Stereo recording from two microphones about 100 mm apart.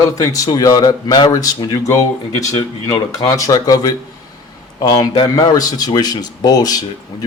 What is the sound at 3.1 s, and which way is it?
A man's voice, 35° left (ahead or behind).